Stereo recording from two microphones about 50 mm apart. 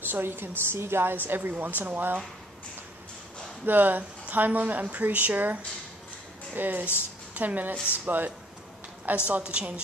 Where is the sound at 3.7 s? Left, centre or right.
Right.